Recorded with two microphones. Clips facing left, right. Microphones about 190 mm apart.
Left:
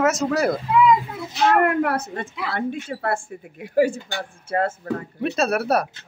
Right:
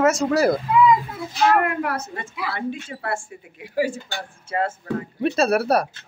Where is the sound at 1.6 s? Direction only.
55° left (ahead or behind).